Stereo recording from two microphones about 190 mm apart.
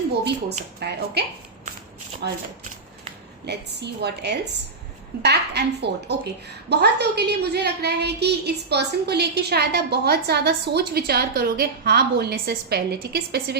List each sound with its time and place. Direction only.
0.8 s a woman's voice: 60° right (ahead or behind)
2.2 s a woman's voice: 60° right (ahead or behind)
3.4 s a woman's voice: 60° right (ahead or behind)